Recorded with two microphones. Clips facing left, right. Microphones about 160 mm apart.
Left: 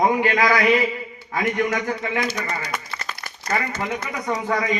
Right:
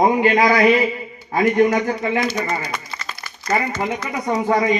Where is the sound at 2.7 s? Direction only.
55° left (ahead or behind).